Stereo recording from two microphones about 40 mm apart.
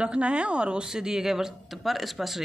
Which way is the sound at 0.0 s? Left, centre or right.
Right.